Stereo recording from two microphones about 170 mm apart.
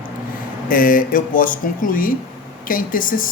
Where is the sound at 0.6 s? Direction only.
55° left (ahead or behind).